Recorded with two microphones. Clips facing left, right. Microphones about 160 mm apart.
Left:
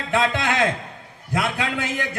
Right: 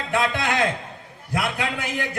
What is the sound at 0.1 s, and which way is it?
Speech, 20° left (ahead or behind).